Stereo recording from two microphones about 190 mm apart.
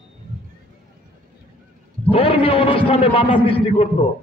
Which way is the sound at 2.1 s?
30° left (ahead or behind).